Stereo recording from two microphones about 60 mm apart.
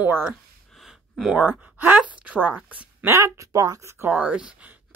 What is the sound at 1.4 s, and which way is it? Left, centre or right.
A woman's voice, right.